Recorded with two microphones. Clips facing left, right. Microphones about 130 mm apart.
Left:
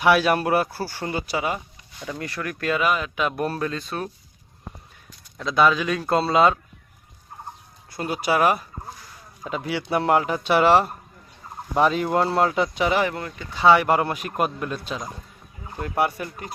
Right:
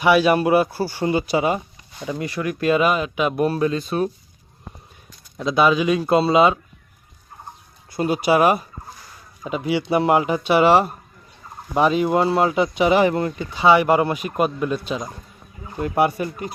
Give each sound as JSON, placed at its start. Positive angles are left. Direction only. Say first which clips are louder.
{"t": 0.0, "sound": "speech", "louder": "right 3 dB", "side_deg": 0}
{"t": 2.0, "sound": "speech", "louder": "right 5 dB", "side_deg": -10}
{"t": 5.4, "sound": "speech", "louder": "right 2 dB", "side_deg": -15}
{"t": 7.9, "sound": "speech", "louder": "right 5 dB", "side_deg": -20}
{"t": 13.6, "sound": "speech", "louder": "right 2 dB", "side_deg": -5}